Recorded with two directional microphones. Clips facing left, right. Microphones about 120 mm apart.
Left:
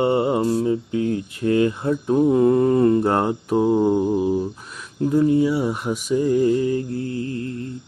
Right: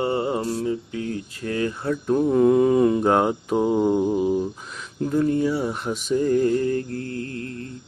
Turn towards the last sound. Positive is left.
turn(degrees=5)  # may be behind; listen again after turning